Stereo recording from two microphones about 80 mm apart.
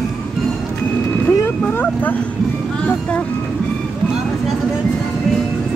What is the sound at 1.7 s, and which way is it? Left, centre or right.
Speech, left.